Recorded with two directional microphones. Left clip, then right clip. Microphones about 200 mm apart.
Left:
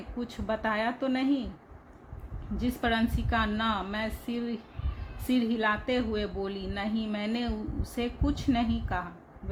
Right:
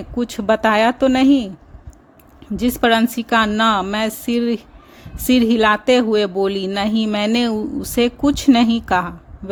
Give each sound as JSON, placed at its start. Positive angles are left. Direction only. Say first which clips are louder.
{"t": 0.2, "sound": "speech", "louder": "right 16 dB", "side_deg": -55}
{"t": 2.6, "sound": "speech", "louder": "right 14 dB", "side_deg": -55}